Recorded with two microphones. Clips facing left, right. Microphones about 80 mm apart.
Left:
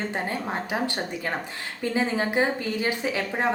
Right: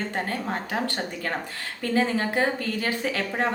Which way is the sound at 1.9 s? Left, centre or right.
Centre.